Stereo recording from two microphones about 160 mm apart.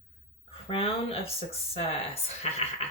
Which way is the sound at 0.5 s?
35° left (ahead or behind).